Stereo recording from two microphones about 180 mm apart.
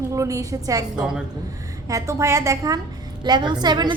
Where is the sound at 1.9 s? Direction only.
15° right (ahead or behind).